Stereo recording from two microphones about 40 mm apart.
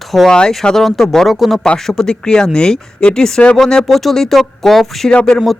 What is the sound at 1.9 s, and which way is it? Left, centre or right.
Speech, centre.